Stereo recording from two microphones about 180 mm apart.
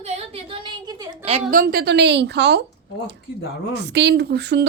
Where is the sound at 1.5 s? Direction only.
55° right (ahead or behind); by 2.7 s 70° right (ahead or behind).